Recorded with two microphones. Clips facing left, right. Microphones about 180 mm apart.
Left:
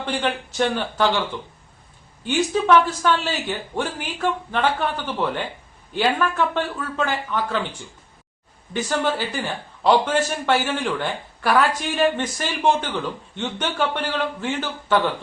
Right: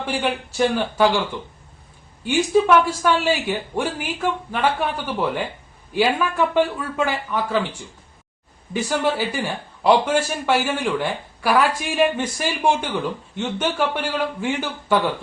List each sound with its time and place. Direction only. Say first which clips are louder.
0.0 s a man's voice: right 1 dB; 10° right (ahead or behind)
2.2 s a man's voice: right 3 dB; 10° right (ahead or behind)